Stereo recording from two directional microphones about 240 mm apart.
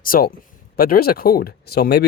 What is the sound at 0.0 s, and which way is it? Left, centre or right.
Speech, left.